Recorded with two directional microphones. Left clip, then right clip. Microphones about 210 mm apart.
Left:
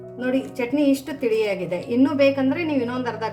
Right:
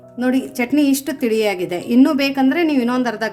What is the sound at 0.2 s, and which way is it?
Speech, 55° right (ahead or behind).